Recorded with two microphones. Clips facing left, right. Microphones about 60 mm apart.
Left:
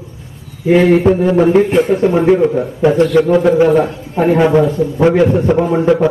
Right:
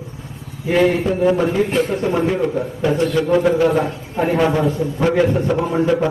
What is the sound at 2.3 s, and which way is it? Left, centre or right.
Speech, left.